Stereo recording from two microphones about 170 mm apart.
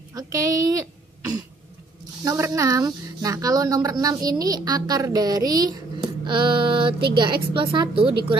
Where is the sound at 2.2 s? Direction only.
20° right (ahead or behind).